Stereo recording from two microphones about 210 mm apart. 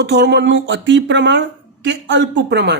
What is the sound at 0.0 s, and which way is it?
Speech, 55° right (ahead or behind).